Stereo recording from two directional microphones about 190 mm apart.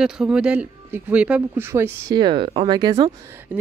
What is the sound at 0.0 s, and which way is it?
Speech, 5° right (ahead or behind).